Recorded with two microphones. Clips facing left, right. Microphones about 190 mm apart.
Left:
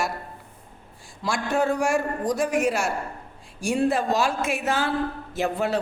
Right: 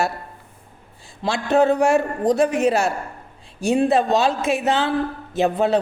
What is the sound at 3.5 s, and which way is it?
A woman's voice, 20° right (ahead or behind).